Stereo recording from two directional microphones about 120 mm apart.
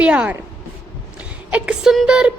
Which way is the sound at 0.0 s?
10° right (ahead or behind).